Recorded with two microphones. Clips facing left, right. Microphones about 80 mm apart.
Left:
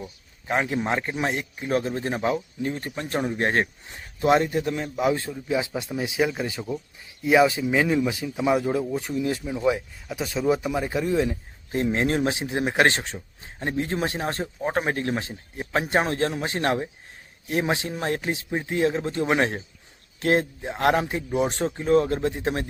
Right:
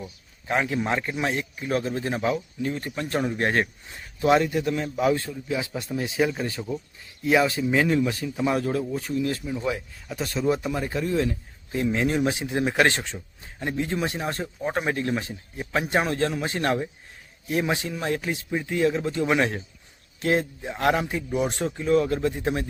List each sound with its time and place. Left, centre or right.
0.5 s a man's voice: left
10.1 s speech: centre
11.7 s a man's voice: left